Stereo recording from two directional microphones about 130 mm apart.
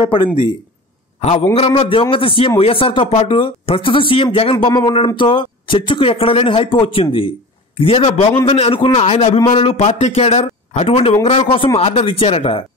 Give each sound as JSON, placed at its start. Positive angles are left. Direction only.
{"t": 1.2, "sound": "a man's voice", "side_deg": 50}